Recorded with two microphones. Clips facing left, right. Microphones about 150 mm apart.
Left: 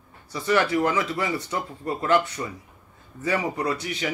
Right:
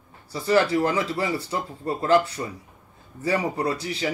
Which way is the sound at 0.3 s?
30° right (ahead or behind).